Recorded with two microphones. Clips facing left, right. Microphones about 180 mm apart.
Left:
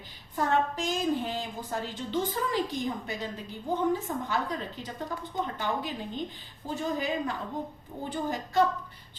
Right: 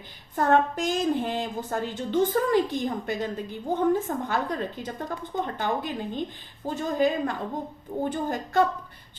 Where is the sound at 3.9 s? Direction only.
50° right (ahead or behind).